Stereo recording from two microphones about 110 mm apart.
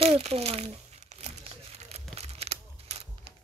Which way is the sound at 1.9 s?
70° right (ahead or behind).